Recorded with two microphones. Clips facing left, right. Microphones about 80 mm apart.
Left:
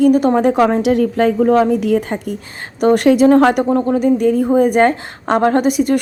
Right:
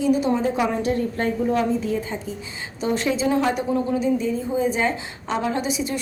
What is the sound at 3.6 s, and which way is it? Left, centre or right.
Speech, left.